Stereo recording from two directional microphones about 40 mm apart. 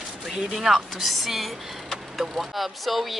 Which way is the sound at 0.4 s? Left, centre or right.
Centre.